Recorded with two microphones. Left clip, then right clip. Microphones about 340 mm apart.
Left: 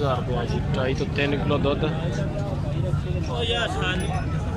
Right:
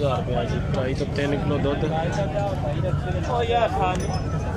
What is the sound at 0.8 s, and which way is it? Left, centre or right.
Speech, centre.